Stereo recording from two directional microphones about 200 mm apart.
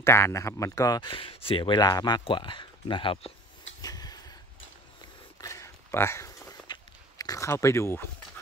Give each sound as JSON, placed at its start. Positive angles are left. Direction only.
{"t": 0.0, "sound": "speech", "side_deg": 10}
{"t": 3.8, "sound": "a sound", "side_deg": 20}
{"t": 5.4, "sound": "walk", "side_deg": 15}